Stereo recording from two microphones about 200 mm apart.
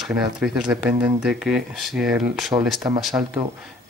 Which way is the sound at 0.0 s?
5° right (ahead or behind).